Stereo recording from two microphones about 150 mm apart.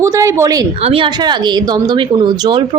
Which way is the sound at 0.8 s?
40° right (ahead or behind).